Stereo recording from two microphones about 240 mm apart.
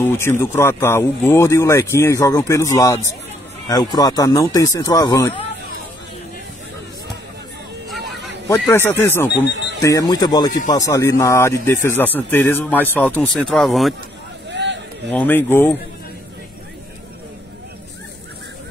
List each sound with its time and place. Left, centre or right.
0.0 s speech: centre
8.5 s speech: centre
14.5 s a sound: right
15.0 s speech: centre